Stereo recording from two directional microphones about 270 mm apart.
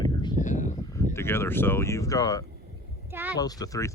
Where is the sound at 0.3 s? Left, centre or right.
Left.